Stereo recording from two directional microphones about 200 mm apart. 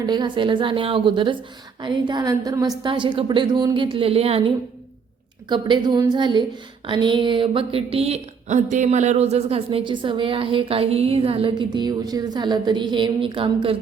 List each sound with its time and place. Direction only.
0.0 s speech: 20° right (ahead or behind)